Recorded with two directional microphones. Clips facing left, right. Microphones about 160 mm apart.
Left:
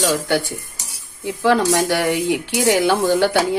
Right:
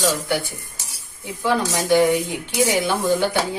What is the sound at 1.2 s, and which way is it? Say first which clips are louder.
Stir: left 5 dB; 80° left.